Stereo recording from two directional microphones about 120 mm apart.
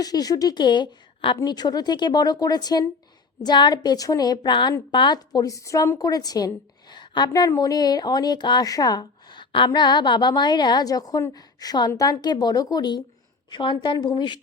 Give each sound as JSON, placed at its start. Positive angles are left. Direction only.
{"t": 0.0, "sound": "speech", "side_deg": 30}